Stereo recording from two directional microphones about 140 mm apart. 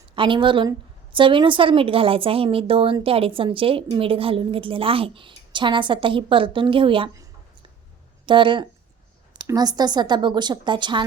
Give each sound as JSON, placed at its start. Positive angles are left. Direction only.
{"t": 0.2, "sound": "speech", "side_deg": -35}
{"t": 8.3, "sound": "speech", "side_deg": -35}